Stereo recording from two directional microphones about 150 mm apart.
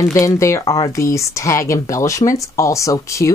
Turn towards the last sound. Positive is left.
turn(degrees=20)  # may be behind; listen again after turning